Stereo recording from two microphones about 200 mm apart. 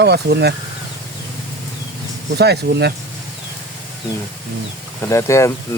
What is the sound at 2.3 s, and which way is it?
Speech, 55° right (ahead or behind).